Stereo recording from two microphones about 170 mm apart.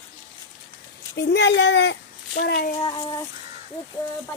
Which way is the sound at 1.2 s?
90° left.